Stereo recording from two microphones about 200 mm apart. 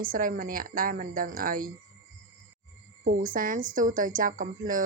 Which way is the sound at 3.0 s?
45° right (ahead or behind).